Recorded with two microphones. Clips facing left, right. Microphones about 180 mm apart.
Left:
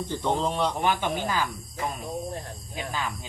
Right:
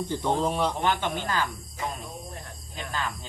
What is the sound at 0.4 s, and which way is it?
Speech, 10° right (ahead or behind).